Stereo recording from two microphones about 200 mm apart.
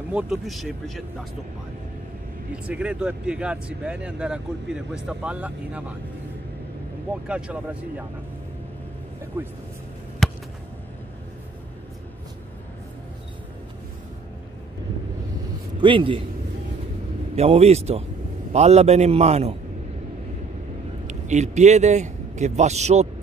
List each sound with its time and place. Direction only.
0.1 s speech: 5° right (ahead or behind)
2.5 s speech: 5° right (ahead or behind)
7.2 s speech: 5° right (ahead or behind)
10.2 s a sound: centre (ahead or behind)
15.8 s a man's voice: 25° right (ahead or behind)
17.4 s a man's voice: 30° right (ahead or behind)
21.1 s a man's voice: 35° right (ahead or behind)